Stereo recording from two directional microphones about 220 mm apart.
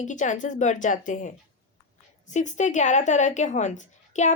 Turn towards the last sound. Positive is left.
turn(degrees=35)  # may be behind; listen again after turning